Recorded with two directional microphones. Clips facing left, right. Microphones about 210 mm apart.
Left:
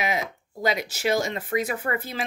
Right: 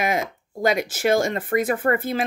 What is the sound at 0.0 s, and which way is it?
Speech, 50° right (ahead or behind).